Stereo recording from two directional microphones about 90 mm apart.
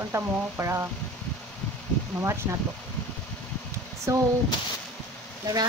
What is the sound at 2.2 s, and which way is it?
Speech, 30° right (ahead or behind).